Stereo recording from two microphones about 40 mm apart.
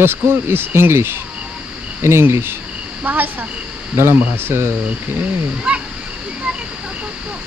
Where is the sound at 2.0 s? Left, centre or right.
Right.